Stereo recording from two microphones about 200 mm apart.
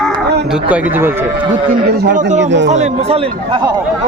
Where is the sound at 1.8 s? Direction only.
55° right (ahead or behind); by 3.7 s 25° right (ahead or behind).